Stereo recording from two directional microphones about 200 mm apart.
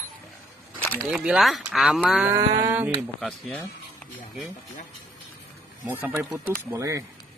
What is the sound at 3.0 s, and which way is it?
Speech, centre (ahead or behind).